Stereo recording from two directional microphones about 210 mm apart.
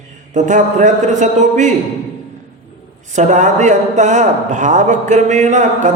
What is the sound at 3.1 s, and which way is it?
A man's voice, 35° right (ahead or behind).